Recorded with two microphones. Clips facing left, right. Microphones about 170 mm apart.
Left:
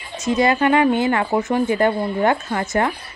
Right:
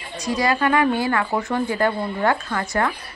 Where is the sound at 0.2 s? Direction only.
25° left (ahead or behind).